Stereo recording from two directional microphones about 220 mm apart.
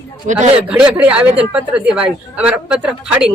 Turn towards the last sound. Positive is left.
turn(degrees=-5)  # may be behind; listen again after turning